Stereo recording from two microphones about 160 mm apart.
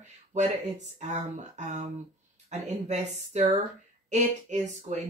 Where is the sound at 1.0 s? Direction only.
45° right (ahead or behind).